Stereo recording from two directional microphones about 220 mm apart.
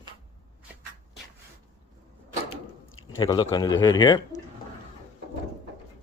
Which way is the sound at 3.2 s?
20° left (ahead or behind).